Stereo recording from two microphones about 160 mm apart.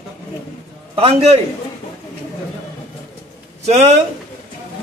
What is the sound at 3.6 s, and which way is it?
Speech, 45° right (ahead or behind).